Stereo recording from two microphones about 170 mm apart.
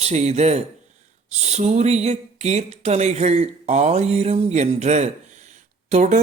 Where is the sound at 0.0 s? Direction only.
40° right (ahead or behind).